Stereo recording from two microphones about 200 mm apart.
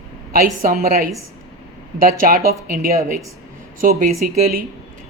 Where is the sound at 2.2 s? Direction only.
45° right (ahead or behind).